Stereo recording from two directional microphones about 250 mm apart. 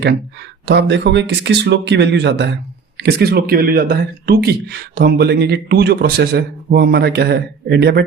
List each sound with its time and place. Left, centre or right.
0.6 s speech: right